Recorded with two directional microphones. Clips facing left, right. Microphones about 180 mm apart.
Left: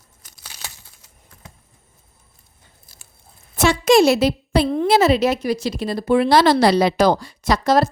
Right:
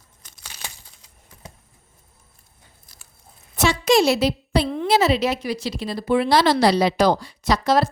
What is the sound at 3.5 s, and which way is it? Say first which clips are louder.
A woman's voice: left 4 dB; 50° left (ahead or behind).